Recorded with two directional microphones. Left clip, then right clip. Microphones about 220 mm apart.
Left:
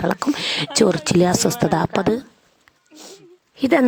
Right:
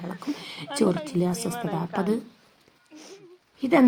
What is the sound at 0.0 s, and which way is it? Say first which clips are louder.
Speech: left 16 dB; 55° left (ahead or behind).